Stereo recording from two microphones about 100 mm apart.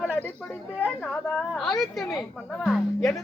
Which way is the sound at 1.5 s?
Centre (ahead or behind).